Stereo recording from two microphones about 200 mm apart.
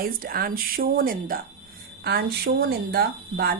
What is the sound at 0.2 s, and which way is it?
A woman's voice, 45° right (ahead or behind).